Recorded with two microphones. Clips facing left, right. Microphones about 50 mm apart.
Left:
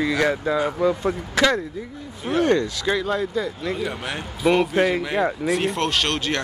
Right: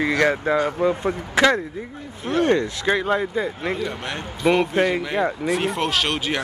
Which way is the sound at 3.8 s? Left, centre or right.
Centre.